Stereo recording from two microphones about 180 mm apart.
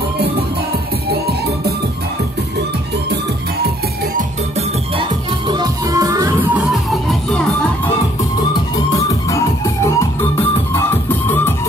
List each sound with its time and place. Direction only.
5.5 s music: 20° right (ahead or behind); by 7.4 s centre (ahead or behind)
9.3 s music: 15° left (ahead or behind)